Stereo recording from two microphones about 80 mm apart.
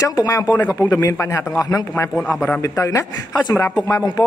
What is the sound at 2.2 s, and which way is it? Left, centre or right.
Speech, centre.